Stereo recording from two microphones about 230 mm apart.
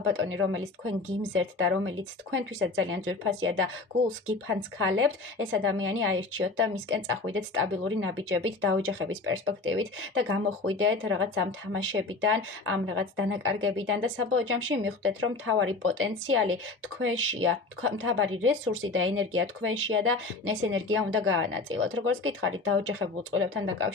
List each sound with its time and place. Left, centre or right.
0.0 s speech: right
4.8 s speech: right